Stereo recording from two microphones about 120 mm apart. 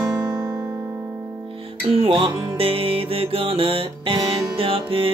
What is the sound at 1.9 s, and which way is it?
Music, 50° right (ahead or behind).